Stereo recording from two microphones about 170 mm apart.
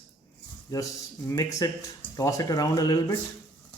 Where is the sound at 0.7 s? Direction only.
20° left (ahead or behind).